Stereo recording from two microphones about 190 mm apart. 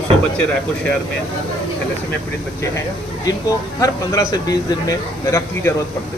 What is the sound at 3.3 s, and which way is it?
A man's voice, 20° left (ahead or behind).